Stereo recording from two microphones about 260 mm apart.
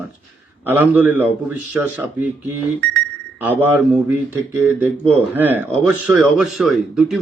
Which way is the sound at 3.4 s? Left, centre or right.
Centre.